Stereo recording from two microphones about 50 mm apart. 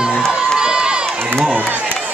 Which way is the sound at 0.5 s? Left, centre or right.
Centre.